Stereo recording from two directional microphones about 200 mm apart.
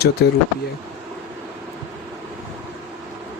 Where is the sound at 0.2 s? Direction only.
55° left (ahead or behind).